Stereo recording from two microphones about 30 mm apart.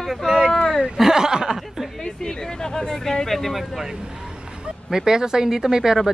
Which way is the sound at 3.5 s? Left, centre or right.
Centre.